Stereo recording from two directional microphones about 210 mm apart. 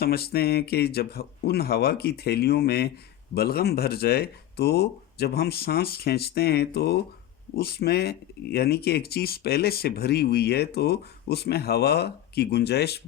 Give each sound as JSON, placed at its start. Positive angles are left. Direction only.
{"t": 0.0, "sound": "speech", "side_deg": 50}